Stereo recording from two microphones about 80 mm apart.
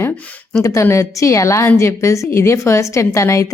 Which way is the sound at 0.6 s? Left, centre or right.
Left.